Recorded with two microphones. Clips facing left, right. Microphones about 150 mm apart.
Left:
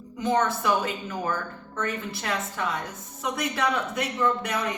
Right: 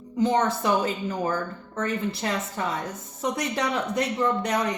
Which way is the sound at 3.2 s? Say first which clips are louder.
Right 1 dB; 30° right (ahead or behind).